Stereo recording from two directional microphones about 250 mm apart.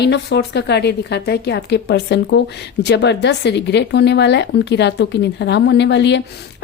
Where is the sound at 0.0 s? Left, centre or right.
Left.